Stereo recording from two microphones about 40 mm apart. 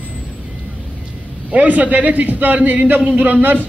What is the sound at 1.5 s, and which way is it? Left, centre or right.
A man's voice, right.